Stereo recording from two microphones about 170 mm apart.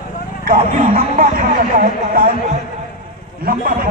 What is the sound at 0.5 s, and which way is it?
Speech, 55° right (ahead or behind).